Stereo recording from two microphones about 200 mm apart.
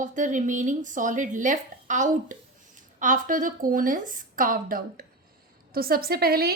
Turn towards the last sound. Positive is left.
turn(degrees=-50)  # may be behind; listen again after turning